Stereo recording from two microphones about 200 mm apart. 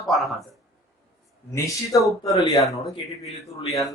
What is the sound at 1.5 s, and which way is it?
Speech, 15° left (ahead or behind).